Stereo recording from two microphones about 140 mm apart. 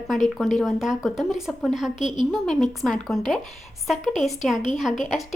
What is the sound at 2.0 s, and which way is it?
Speech, 35° right (ahead or behind).